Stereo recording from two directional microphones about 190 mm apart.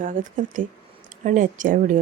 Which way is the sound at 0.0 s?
45° right (ahead or behind).